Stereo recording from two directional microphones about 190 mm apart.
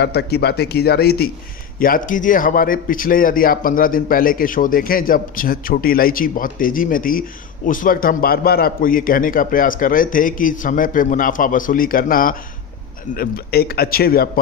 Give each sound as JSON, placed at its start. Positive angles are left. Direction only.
{"t": 0.0, "sound": "a man's voice", "side_deg": 60}